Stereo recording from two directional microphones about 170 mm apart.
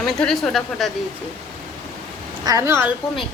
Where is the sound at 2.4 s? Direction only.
15° right (ahead or behind).